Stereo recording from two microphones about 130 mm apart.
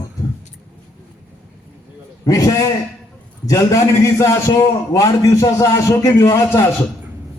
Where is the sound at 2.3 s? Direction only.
30° left (ahead or behind).